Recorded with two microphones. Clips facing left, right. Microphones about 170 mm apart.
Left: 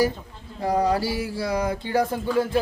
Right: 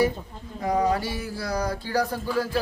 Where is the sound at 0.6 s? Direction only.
30° left (ahead or behind).